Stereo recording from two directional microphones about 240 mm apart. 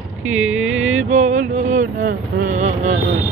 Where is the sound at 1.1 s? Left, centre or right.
Right.